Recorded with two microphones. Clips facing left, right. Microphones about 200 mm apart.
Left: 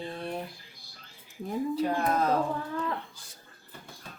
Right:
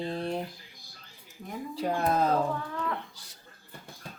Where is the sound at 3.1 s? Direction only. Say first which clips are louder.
Left 1 dB; 50° left (ahead or behind).